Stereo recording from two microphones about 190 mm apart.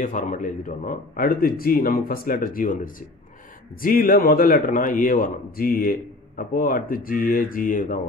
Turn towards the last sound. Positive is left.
turn(degrees=45)  # may be behind; listen again after turning